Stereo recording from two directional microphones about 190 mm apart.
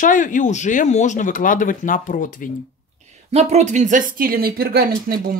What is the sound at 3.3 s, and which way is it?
Speech, 35° right (ahead or behind).